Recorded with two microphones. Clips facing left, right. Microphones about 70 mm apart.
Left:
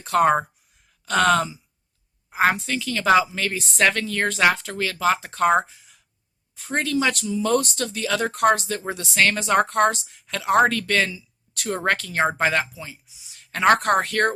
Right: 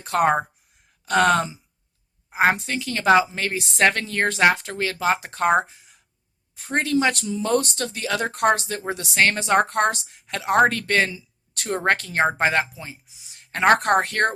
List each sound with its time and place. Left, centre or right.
0.0 s speech: right